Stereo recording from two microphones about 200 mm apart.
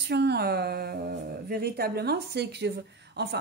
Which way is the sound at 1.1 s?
50° right (ahead or behind).